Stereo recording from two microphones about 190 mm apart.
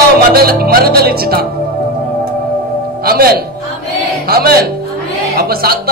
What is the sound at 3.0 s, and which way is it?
A man's voice, 50° right (ahead or behind).